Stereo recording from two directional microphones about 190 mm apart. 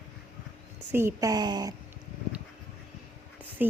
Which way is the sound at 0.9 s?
15° right (ahead or behind).